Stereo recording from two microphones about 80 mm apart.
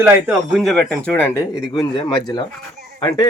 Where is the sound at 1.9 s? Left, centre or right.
Left.